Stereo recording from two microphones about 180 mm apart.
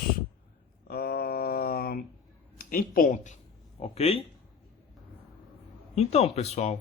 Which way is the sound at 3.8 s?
35° left (ahead or behind).